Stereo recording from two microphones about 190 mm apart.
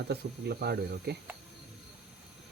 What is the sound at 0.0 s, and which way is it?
Speech, 55° right (ahead or behind).